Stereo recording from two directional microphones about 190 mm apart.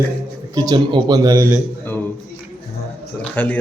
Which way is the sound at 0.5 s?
20° right (ahead or behind).